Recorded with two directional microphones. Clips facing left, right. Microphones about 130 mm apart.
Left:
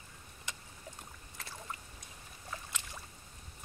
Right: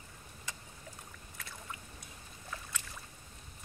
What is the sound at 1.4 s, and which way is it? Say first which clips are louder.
Boat: left 2 dB; 30° left (ahead or behind).